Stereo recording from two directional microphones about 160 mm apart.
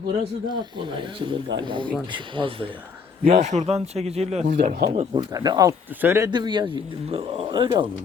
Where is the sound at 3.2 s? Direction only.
45° right (ahead or behind); by 6.3 s 15° right (ahead or behind).